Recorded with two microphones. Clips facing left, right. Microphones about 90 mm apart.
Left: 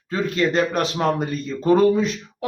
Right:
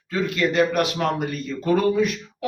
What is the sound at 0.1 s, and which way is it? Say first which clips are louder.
A man's voice: left 2 dB; 30° left (ahead or behind).